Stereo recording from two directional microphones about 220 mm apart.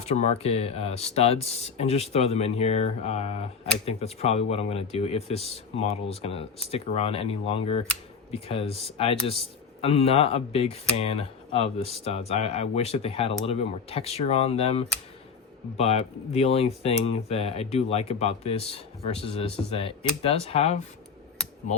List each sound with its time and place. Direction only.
0.0 s speech: 30° left (ahead or behind)